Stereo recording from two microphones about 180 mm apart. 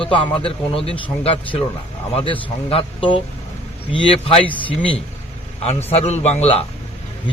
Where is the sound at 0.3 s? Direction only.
30° left (ahead or behind).